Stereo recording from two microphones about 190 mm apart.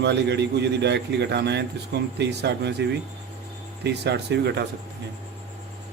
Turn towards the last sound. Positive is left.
turn(degrees=-60)  # may be behind; listen again after turning